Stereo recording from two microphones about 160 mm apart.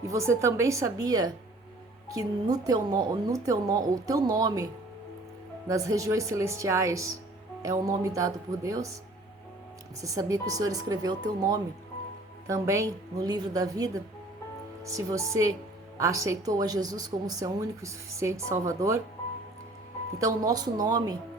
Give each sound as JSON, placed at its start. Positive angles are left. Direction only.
{"t": 0.1, "sound": "speech", "side_deg": -20}
{"t": 10.0, "sound": "speech", "side_deg": -20}
{"t": 20.1, "sound": "speech", "side_deg": -20}